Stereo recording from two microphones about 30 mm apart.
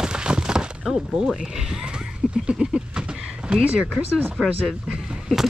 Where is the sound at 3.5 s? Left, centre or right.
Right.